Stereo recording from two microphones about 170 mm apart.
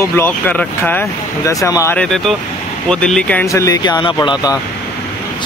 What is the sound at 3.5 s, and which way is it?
Speech, 20° left (ahead or behind).